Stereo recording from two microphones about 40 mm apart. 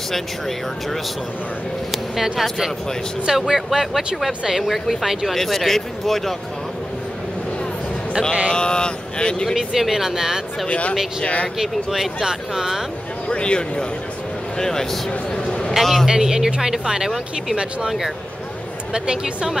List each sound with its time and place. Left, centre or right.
3.3 s speech: centre
8.5 s speech: left
9.6 s speech: centre
10.7 s speech: left
11.5 s speech: centre
13.3 s speech: left
14.6 s a man's voice: centre
15.3 s a sound: left
15.7 s a man's voice: centre
16.1 s speech: centre
18.9 s a woman's voice: right